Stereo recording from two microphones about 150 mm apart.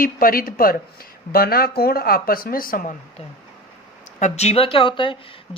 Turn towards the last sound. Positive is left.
turn(degrees=35)  # may be behind; listen again after turning